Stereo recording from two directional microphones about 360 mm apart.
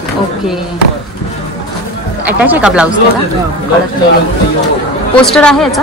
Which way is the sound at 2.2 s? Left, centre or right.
Centre.